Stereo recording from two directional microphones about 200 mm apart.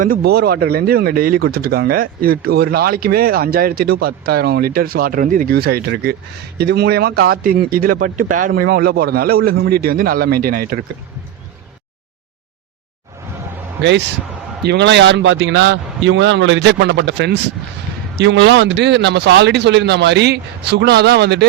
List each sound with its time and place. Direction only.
0.0 s speech: 50° right (ahead or behind)
14.6 s a man's voice: 55° right (ahead or behind)